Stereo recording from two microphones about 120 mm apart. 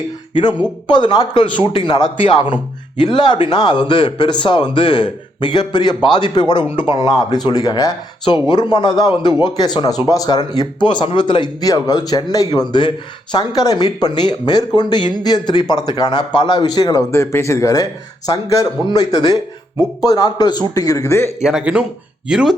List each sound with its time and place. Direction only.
0.9 s speech: 40° left (ahead or behind)
21.4 s speech: 5° right (ahead or behind)